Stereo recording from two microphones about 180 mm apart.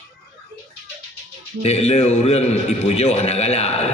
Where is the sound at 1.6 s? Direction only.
35° left (ahead or behind).